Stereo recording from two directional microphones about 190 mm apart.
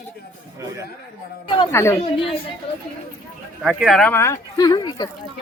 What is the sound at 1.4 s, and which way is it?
Speech, 25° left (ahead or behind).